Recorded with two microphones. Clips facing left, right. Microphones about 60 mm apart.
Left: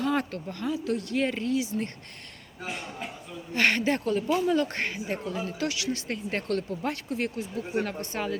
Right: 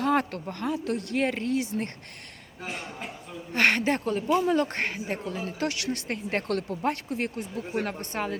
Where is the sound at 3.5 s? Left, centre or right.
Right.